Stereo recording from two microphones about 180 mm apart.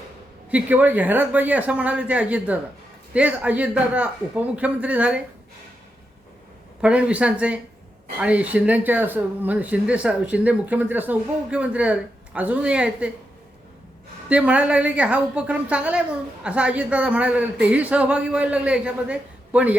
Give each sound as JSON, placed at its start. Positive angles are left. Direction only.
{"t": 0.5, "sound": "speech", "side_deg": -10}
{"t": 6.8, "sound": "speech", "side_deg": -5}
{"t": 14.3, "sound": "speech", "side_deg": -5}